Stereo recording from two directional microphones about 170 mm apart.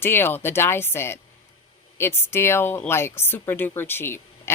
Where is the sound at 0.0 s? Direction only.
15° left (ahead or behind).